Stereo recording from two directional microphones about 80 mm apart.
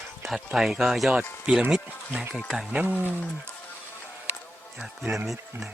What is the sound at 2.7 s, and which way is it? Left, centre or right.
Speech, centre.